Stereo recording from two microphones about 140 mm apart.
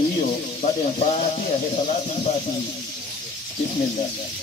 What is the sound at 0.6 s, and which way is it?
Speech, 55° left (ahead or behind).